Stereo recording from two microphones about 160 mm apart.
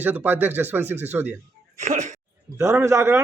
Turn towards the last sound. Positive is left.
turn(degrees=-15)  # may be behind; listen again after turning